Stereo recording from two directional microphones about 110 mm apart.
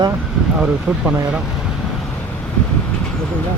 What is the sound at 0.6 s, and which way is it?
Speech, 10° right (ahead or behind).